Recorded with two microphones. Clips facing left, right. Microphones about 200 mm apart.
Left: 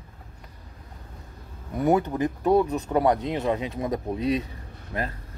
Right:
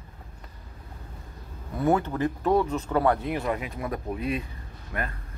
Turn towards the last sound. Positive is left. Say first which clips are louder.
# left 2 dB
turn(degrees=25)  # may be behind; listen again after turning